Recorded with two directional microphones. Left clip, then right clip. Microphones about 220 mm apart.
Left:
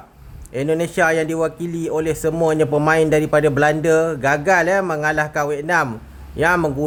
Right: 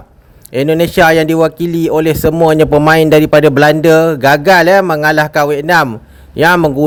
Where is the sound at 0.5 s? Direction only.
40° right (ahead or behind).